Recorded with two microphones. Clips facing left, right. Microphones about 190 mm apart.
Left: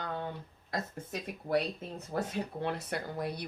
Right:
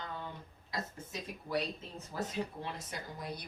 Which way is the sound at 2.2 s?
60° left (ahead or behind).